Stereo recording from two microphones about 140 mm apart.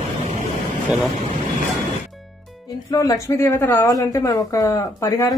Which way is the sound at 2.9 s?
25° left (ahead or behind).